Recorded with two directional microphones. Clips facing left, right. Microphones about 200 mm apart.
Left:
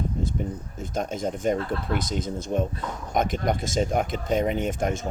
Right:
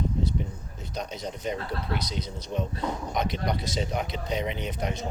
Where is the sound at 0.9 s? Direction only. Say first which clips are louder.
Left 6 dB; 50° left (ahead or behind).